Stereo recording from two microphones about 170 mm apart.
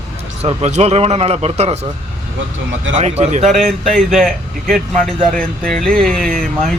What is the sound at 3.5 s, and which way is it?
Speech, centre (ahead or behind).